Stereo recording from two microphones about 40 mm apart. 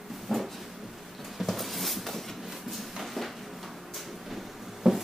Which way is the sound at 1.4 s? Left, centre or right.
Centre.